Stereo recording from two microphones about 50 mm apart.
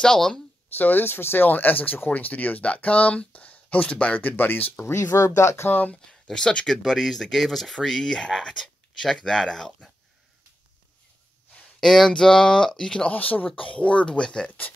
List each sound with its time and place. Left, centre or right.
0.0 s speech: centre
0.7 s speech: left
4.9 s speech: left
5.7 s speech: left
6.2 s speech: centre
6.8 s speech: centre
11.8 s speech: centre
13.1 s speech: left; by 14.5 s centre